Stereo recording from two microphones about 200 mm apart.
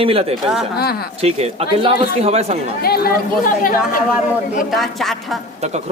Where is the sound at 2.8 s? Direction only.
50° left (ahead or behind).